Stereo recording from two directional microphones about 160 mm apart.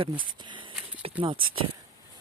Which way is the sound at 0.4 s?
30° right (ahead or behind).